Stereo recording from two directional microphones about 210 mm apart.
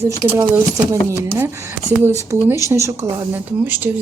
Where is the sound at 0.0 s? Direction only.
10° right (ahead or behind).